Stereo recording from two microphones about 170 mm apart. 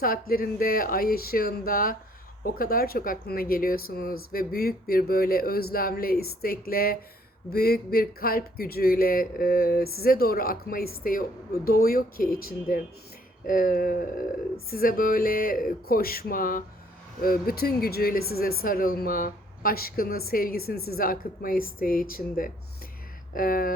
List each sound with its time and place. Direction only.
0.0 s speech: 60° left (ahead or behind)